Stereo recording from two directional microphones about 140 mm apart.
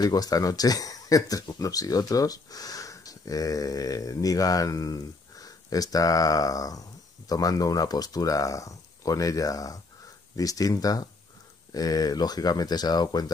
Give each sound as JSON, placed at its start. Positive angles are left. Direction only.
{"t": 0.0, "sound": "speech", "side_deg": 25}